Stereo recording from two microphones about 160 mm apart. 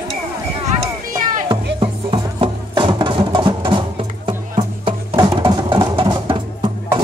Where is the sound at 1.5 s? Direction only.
30° right (ahead or behind).